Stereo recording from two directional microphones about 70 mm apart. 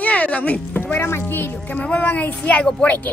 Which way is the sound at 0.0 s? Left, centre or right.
Centre.